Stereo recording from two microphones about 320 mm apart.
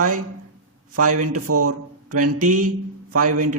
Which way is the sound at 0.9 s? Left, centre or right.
Right.